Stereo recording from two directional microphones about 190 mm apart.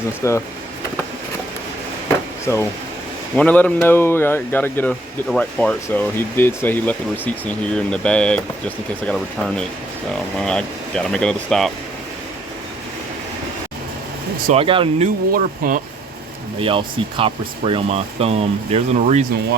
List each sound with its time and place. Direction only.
0.2 s speech: 15° left (ahead or behind)
2.5 s speech: 15° left (ahead or behind)
14.5 s speech: 30° right (ahead or behind)
15.3 s speech: 45° right (ahead or behind)
16.6 s speech: 30° right (ahead or behind)